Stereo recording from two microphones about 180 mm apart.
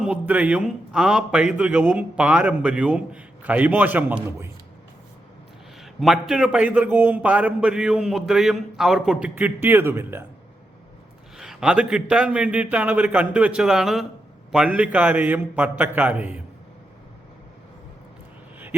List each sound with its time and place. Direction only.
0.0 s a man's voice: 5° right (ahead or behind)
5.8 s a man's voice: centre (ahead or behind)
11.3 s a man's voice: 5° right (ahead or behind)